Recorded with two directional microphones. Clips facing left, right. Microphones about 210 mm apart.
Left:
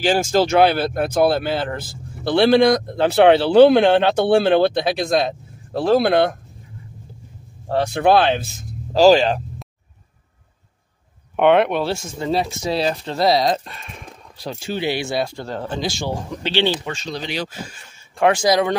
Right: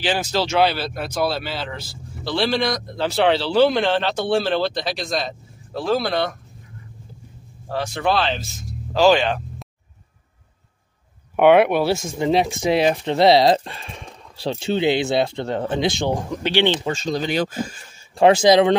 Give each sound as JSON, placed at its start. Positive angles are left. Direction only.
{"t": 0.0, "sound": "speech", "side_deg": 45}
{"t": 7.6, "sound": "speech", "side_deg": 55}
{"t": 8.9, "sound": "speech", "side_deg": 35}
{"t": 11.3, "sound": "speech", "side_deg": -5}
{"t": 16.9, "sound": "speech", "side_deg": -45}
{"t": 18.1, "sound": "speech", "side_deg": -25}